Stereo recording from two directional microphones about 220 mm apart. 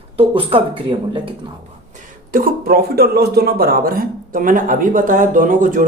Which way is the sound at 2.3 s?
40° right (ahead or behind).